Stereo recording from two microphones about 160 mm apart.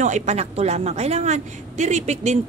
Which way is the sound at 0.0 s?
45° right (ahead or behind).